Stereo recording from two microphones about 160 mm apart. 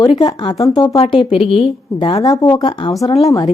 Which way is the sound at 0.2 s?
30° left (ahead or behind).